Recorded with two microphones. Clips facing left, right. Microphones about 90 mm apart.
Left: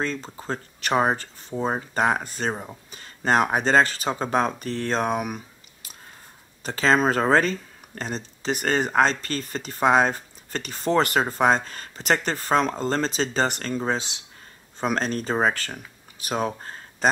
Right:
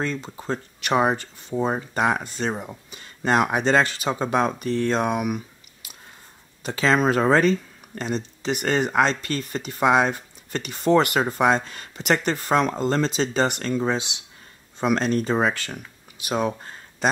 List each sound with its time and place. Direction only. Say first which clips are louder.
0.0 s speech: right 1 dB; 40° left (ahead or behind)